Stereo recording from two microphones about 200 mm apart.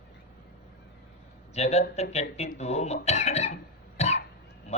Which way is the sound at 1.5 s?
35° left (ahead or behind).